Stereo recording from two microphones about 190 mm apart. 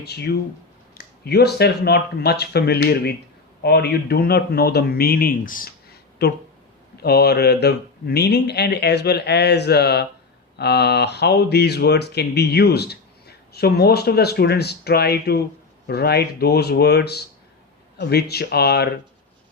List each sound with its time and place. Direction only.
0.0 s speech: 60° left (ahead or behind)